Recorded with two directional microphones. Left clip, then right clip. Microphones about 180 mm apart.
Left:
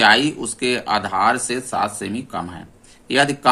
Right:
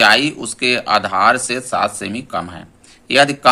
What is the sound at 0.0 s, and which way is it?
Speech, 15° right (ahead or behind).